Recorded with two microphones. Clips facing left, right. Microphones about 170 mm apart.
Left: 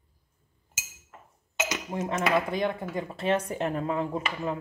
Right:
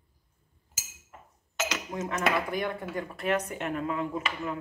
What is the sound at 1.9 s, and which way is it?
Cutlery, 30° left (ahead or behind).